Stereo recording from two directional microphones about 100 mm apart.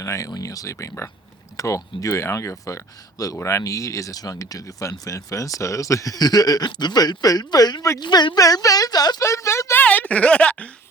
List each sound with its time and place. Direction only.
0.0 s speech: 35° left (ahead or behind)
8.0 s speech: 50° left (ahead or behind)
8.4 s speech: 35° left (ahead or behind)
9.2 s a sound: 30° left (ahead or behind)
9.8 s speech: 15° left (ahead or behind)